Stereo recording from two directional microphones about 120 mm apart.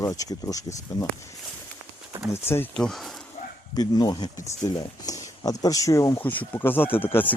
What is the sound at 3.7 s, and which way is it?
Speech, 35° left (ahead or behind).